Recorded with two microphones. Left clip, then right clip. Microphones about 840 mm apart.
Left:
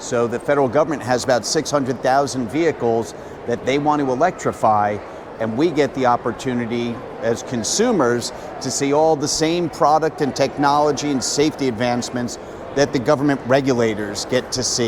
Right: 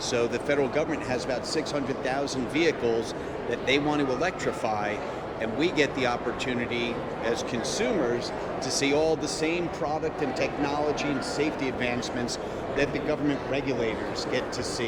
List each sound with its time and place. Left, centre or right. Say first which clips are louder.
0.1 s speech: left 8 dB; left